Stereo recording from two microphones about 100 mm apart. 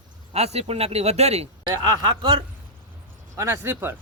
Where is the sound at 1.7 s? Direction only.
50° right (ahead or behind).